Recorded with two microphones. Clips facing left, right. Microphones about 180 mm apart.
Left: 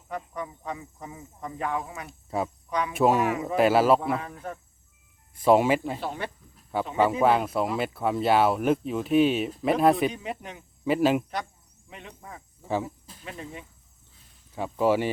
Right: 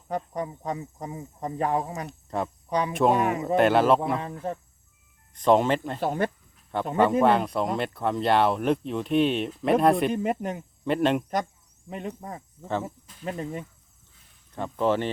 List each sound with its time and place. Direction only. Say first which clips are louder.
0.1 s speech: right 4 dB; 35° right (ahead or behind)
2.0 s speech: even; 5° left (ahead or behind)
2.6 s speech: right 3 dB; 35° right (ahead or behind)
2.9 s speech: left 1 dB; 5° left (ahead or behind)
4.2 s speech: right 5 dB; 30° right (ahead or behind)
5.3 s speech: left 1 dB; 5° left (ahead or behind)
6.0 s speech: right 7 dB; 50° right (ahead or behind)
6.7 s speech: right 2 dB; 5° left (ahead or behind)
10.1 s speech: right 8 dB; 45° right (ahead or behind)
10.8 s speech: left 1 dB; 5° left (ahead or behind)
11.9 s speech: right 9 dB; 45° right (ahead or behind)
14.5 s speech: left 1 dB; 10° left (ahead or behind)